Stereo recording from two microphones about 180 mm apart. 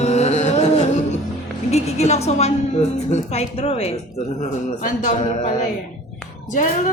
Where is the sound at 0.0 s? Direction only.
35° left (ahead or behind).